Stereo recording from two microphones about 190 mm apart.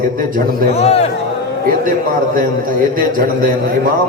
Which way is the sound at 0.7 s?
35° left (ahead or behind).